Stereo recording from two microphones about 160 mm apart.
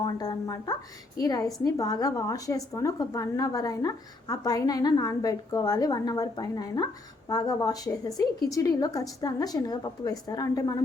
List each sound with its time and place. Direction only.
0.0 s a woman's voice: 25° left (ahead or behind)